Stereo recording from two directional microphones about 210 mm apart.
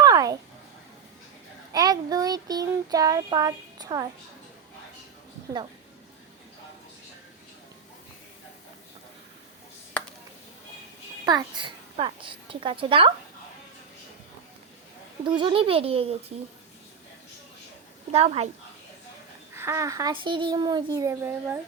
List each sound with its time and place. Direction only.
0.0 s a sound: 15° right (ahead or behind)
1.7 s child singing: 20° right (ahead or behind)
11.3 s a child's voice: 20° right (ahead or behind)
15.2 s a child's voice: 20° right (ahead or behind)
18.1 s a woman's voice: 30° right (ahead or behind)
19.5 s a child's voice: 15° right (ahead or behind)